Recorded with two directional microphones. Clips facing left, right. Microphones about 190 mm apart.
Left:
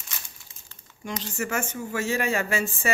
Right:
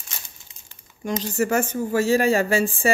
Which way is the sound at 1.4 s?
35° right (ahead or behind).